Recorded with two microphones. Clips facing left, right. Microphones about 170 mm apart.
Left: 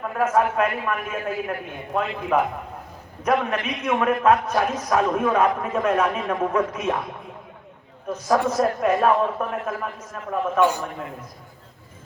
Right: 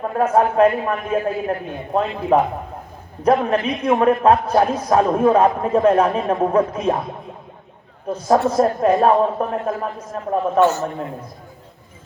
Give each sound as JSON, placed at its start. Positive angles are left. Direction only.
{"t": 0.0, "sound": "a man's voice", "side_deg": -30}
{"t": 10.6, "sound": "a man's voice", "side_deg": 15}